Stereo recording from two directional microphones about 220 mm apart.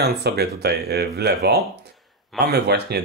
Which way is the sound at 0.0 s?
45° right (ahead or behind).